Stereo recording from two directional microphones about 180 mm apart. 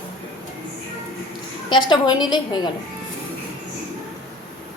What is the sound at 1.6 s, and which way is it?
Speech, 25° left (ahead or behind).